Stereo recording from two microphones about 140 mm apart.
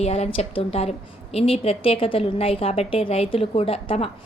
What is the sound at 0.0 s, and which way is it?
A woman's voice, 50° left (ahead or behind).